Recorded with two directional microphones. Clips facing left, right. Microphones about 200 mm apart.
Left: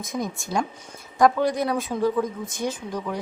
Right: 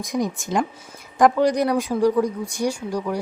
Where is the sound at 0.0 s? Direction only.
15° right (ahead or behind).